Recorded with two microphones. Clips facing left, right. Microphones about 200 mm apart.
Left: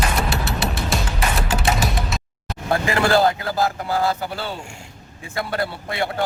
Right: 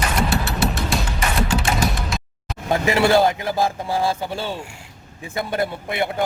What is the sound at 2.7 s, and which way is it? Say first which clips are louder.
A man's voice: right 2 dB; 20° right (ahead or behind).